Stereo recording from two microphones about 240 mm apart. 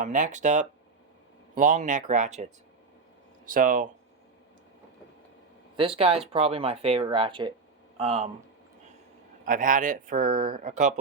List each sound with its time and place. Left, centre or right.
0.0 s speech: right
5.7 s speech: right
9.5 s speech: right